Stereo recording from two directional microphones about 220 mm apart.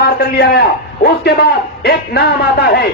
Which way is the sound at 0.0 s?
45° left (ahead or behind).